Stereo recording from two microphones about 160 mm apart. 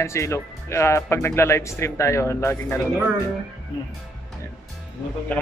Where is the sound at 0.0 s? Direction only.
15° left (ahead or behind).